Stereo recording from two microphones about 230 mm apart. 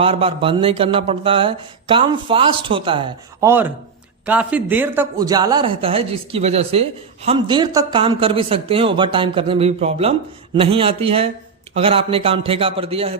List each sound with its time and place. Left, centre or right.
0.0 s speech: right
3.4 s speech: centre; by 13.1 s right